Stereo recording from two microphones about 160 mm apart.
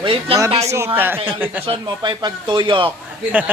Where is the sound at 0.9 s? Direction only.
15° right (ahead or behind).